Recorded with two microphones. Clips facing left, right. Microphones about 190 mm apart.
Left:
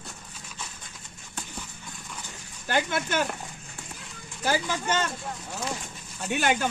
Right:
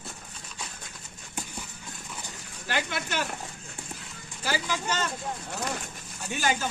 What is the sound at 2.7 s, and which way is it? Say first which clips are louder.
Speech: left 4 dB; 50° left (ahead or behind).